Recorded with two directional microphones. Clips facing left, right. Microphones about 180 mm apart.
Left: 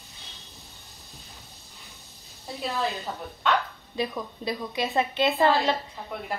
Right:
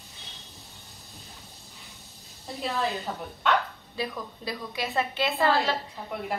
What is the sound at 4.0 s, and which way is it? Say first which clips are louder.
A woman's voice: left 3 dB; 20° left (ahead or behind).